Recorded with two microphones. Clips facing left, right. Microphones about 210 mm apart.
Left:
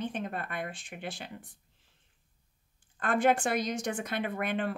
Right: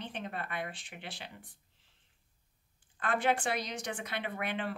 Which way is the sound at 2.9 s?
45° left (ahead or behind).